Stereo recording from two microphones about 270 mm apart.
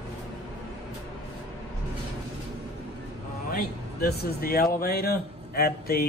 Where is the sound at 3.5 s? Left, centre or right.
Left.